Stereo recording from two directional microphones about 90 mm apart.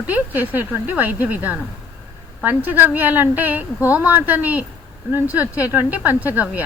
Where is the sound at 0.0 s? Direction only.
20° right (ahead or behind).